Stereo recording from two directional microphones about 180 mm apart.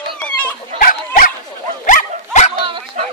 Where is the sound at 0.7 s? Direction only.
50° left (ahead or behind).